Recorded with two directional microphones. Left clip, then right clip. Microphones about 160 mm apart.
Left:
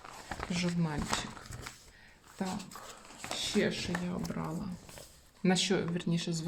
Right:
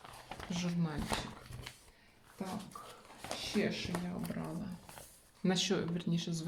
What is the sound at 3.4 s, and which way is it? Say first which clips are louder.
Speech: left 5 dB; 55° left (ahead or behind).